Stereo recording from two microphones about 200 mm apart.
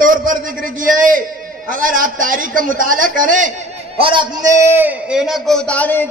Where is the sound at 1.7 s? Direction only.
45° right (ahead or behind).